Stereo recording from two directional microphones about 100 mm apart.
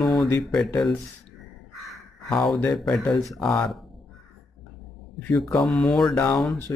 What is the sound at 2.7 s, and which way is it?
Speech, 5° left (ahead or behind).